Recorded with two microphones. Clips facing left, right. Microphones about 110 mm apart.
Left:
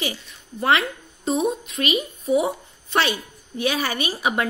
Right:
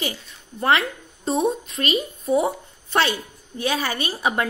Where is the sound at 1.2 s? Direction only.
Centre (ahead or behind).